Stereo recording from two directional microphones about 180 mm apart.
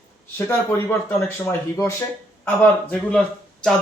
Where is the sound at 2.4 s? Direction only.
10° left (ahead or behind).